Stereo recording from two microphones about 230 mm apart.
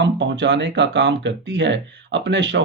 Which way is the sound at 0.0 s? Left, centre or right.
Right.